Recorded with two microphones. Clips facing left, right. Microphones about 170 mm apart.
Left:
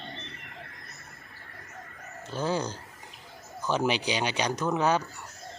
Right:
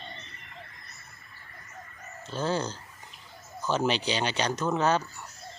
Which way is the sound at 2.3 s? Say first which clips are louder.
Even; 15° left (ahead or behind).